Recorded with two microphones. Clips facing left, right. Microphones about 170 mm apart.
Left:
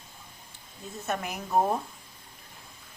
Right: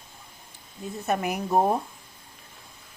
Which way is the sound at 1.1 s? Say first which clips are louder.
Right 6 dB; 15° right (ahead or behind).